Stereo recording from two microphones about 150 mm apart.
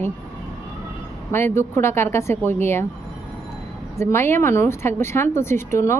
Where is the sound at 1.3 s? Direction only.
15° left (ahead or behind).